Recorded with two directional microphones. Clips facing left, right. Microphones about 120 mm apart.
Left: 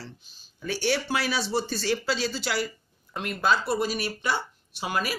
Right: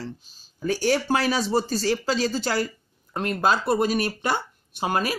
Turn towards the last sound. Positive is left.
turn(degrees=-45)  # may be behind; listen again after turning